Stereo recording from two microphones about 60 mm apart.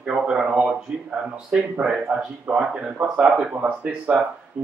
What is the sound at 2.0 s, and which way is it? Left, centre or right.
A man's voice, right.